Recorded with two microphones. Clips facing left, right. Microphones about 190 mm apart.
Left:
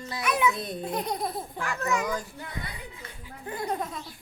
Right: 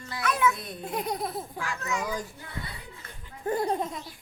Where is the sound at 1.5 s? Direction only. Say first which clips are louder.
Left 3 dB; 55° left (ahead or behind).